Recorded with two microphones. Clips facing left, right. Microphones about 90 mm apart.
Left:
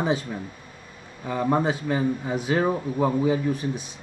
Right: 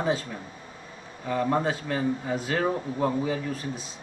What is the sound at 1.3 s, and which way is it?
Speech, 15° left (ahead or behind).